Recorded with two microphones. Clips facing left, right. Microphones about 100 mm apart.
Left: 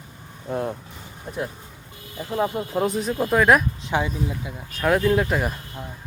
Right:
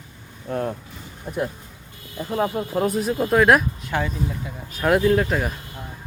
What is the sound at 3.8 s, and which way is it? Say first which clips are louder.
Speech: left 1 dB; 15° left (ahead or behind).